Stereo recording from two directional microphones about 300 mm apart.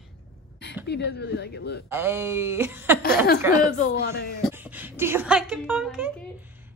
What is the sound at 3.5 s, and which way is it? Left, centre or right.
Speech, left.